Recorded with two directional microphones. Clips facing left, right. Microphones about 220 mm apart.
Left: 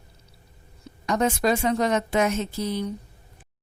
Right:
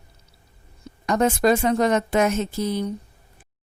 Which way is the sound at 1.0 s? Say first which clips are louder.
Right 4 dB; 50° right (ahead or behind).